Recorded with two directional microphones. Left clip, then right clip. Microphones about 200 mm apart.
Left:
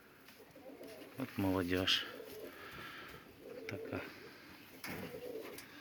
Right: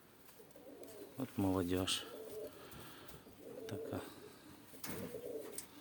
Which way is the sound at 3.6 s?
20° right (ahead or behind).